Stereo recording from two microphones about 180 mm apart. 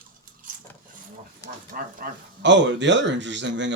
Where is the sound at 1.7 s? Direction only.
45° right (ahead or behind).